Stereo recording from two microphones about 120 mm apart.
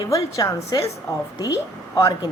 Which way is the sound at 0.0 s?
30° left (ahead or behind).